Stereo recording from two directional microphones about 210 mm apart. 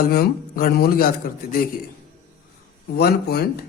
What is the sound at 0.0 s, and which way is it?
A man's voice, 45° left (ahead or behind).